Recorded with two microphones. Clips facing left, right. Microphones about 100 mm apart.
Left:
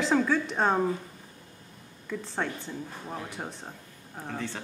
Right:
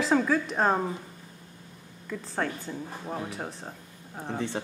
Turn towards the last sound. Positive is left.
turn(degrees=-20)  # may be behind; listen again after turning